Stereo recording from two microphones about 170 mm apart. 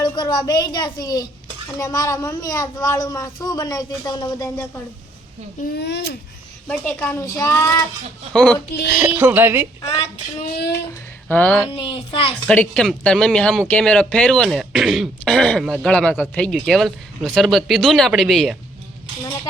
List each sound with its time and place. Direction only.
0.0 s a woman's voice: 25° left (ahead or behind)
5.7 s a child's voice: 90° left
6.7 s a child's voice: 5° left (ahead or behind)
8.3 s speech: 5° left (ahead or behind)
9.0 s speech: 15° right (ahead or behind)
11.3 s a child's voice: 10° left (ahead or behind)
11.7 s a child's voice: 35° left (ahead or behind)
12.5 s speech: 5° left (ahead or behind)